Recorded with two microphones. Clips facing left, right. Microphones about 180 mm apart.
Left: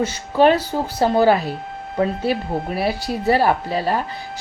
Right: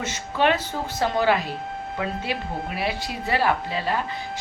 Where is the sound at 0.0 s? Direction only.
35° left (ahead or behind).